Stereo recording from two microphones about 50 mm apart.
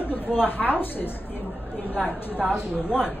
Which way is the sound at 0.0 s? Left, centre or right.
Left.